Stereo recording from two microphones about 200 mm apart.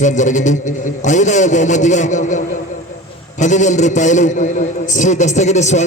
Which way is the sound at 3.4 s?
35° left (ahead or behind).